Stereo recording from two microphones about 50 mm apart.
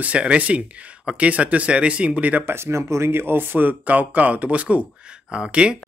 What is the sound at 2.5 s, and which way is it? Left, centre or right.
Speech, right.